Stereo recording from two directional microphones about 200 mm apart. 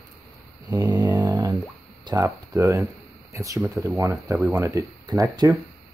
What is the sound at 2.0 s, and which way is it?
Speech, 15° right (ahead or behind).